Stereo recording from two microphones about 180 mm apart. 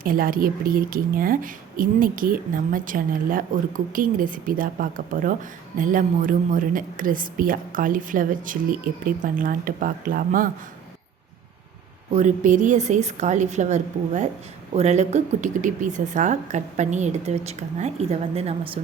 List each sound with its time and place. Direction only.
0.0 s a woman's voice: 50° right (ahead or behind)
12.1 s speech: 45° right (ahead or behind)